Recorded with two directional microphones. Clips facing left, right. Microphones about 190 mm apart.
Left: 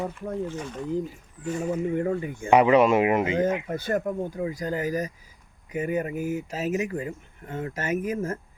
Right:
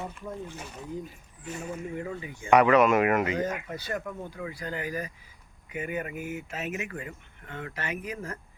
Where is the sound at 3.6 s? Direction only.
50° left (ahead or behind).